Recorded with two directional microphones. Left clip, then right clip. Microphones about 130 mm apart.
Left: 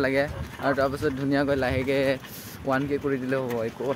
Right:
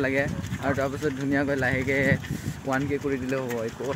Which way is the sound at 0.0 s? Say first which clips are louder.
Left 1 dB; 20° left (ahead or behind).